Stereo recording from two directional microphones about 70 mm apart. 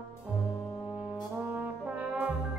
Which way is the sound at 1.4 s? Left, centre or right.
Right.